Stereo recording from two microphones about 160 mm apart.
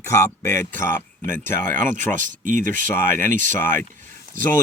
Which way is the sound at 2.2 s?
55° right (ahead or behind).